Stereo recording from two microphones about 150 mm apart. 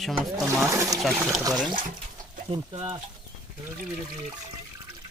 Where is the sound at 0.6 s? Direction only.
20° right (ahead or behind).